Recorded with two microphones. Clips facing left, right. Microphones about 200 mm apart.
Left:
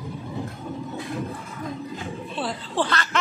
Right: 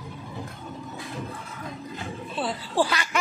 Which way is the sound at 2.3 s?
5° right (ahead or behind).